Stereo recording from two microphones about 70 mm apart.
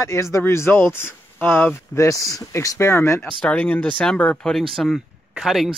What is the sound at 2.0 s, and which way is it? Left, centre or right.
Speech, left.